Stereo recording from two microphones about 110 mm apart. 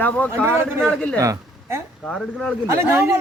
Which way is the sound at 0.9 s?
5° left (ahead or behind).